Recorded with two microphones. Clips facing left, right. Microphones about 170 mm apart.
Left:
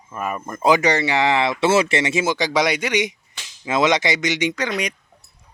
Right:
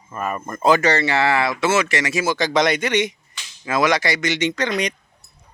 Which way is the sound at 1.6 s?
30° left (ahead or behind).